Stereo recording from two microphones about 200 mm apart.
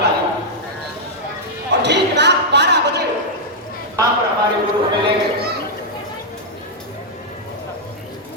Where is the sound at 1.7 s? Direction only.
60° right (ahead or behind).